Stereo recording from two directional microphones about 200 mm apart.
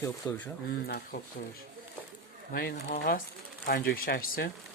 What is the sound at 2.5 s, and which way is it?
Speech, 50° left (ahead or behind).